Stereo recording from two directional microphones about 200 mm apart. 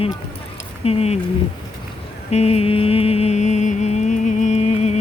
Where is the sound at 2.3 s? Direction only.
30° left (ahead or behind).